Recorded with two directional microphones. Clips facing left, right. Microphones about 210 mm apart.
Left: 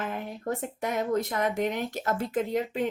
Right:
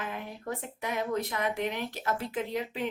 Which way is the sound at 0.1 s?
45° left (ahead or behind).